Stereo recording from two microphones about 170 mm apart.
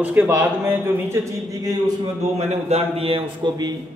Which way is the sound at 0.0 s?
10° right (ahead or behind).